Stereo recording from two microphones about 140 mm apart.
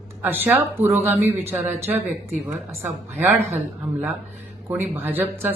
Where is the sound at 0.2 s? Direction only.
15° right (ahead or behind).